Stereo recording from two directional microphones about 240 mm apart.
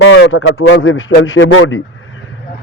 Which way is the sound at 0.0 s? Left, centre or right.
Left.